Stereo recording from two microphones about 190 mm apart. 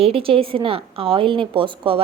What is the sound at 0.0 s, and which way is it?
A woman's voice, 30° right (ahead or behind).